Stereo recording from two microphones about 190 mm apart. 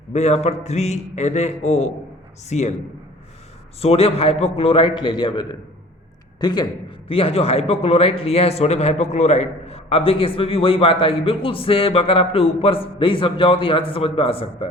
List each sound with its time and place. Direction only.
0.1 s a man's voice: 35° left (ahead or behind)
3.8 s a man's voice: 30° left (ahead or behind)